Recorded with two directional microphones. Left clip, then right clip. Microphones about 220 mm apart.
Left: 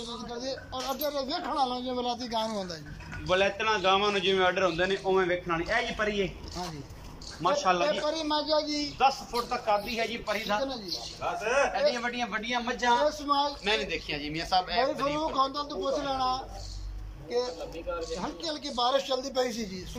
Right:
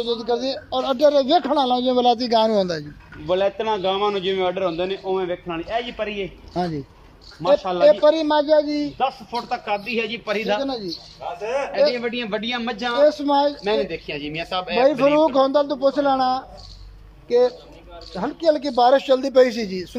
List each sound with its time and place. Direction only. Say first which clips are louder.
0.0 s a man's voice: right 14 dB; 50° right (ahead or behind)
3.3 s a man's voice: right 5 dB; 25° right (ahead or behind)
7.4 s a man's voice: right 7 dB; 20° right (ahead or behind)
7.8 s a man's voice: right 14 dB; 45° right (ahead or behind)
9.3 s a man's voice: right 4 dB; 45° right (ahead or behind)
11.7 s a man's voice: right 8 dB; 50° right (ahead or behind)
18.2 s a man's voice: right 15 dB; 40° right (ahead or behind)